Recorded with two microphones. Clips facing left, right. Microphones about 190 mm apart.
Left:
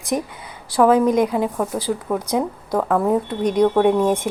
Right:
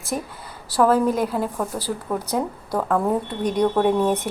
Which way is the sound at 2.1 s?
10° right (ahead or behind).